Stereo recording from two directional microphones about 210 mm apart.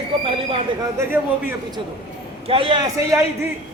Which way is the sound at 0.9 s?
10° right (ahead or behind).